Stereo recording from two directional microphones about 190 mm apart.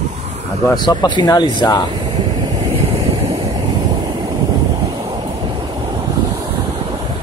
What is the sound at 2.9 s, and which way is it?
Vehicle, 30° right (ahead or behind).